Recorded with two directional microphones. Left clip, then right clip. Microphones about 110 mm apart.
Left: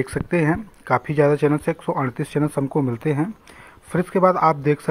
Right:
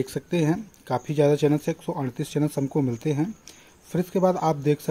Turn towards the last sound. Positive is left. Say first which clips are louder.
# left 6 dB
turn(degrees=-10)  # may be behind; listen again after turning